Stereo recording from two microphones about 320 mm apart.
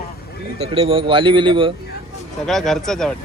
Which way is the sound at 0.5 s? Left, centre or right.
Centre.